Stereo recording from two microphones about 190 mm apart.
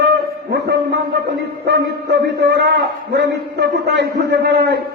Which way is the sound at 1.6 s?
65° right (ahead or behind).